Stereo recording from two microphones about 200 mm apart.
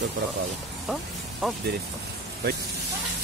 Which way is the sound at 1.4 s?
Centre (ahead or behind).